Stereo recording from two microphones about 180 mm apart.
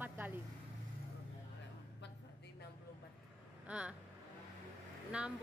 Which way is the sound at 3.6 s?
5° right (ahead or behind).